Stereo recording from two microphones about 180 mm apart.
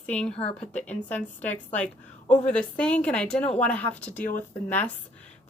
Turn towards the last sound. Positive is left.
turn(degrees=10)  # may be behind; listen again after turning